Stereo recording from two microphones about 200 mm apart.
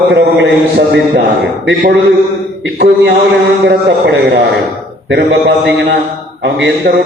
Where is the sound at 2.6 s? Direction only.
55° right (ahead or behind).